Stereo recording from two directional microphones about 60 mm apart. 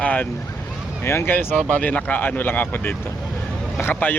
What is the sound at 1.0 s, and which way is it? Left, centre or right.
Speech, left.